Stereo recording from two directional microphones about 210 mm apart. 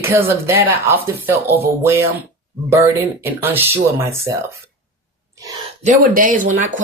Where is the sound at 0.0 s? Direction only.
10° right (ahead or behind).